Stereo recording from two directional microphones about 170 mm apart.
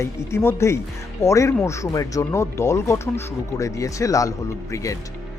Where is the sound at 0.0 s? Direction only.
15° left (ahead or behind).